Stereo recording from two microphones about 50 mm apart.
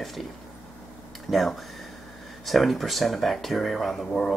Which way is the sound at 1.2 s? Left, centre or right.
Centre.